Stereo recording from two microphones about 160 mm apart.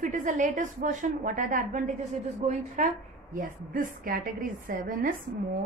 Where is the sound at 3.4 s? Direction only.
60° right (ahead or behind).